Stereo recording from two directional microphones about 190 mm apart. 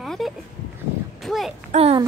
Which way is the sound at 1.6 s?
35° right (ahead or behind).